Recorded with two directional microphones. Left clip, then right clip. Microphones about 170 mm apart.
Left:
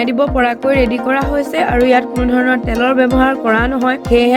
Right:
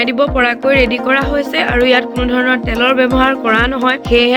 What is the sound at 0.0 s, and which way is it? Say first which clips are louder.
Speech: right 1 dB; 45° left (ahead or behind).